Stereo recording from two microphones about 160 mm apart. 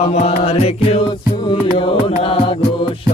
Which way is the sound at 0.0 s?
40° left (ahead or behind).